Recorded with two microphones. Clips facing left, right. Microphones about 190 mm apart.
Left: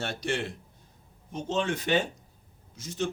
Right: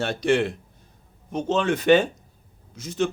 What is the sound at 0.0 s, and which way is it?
Speech, 85° right.